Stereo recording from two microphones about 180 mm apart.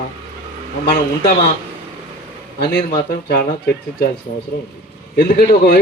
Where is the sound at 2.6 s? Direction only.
60° left (ahead or behind).